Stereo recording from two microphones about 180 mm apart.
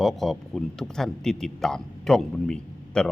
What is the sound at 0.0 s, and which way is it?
Speech, centre (ahead or behind).